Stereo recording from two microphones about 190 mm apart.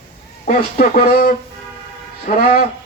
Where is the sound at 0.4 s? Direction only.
50° left (ahead or behind).